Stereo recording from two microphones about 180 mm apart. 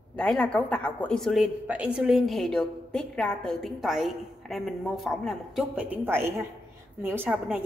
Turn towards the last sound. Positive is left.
turn(degrees=-10)  # may be behind; listen again after turning